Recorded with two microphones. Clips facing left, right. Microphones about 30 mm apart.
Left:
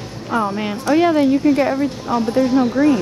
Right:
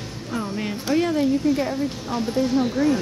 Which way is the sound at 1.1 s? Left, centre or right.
Left.